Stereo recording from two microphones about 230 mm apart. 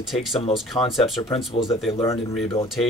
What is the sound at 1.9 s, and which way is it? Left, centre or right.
Speech, centre.